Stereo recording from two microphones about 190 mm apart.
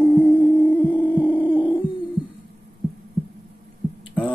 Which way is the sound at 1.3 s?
10° right (ahead or behind).